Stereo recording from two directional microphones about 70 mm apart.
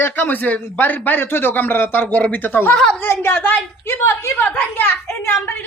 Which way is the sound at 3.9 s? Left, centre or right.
Left.